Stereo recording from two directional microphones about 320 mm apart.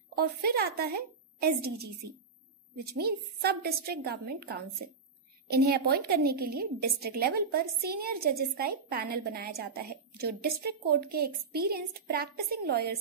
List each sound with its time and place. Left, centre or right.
0.1 s a woman's voice: right